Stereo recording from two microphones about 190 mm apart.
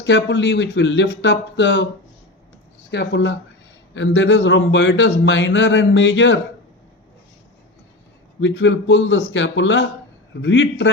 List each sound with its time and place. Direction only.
0.0 s speech: 70° left (ahead or behind)
2.9 s speech: 60° left (ahead or behind)
3.9 s speech: 80° left
8.4 s speech: 75° left (ahead or behind)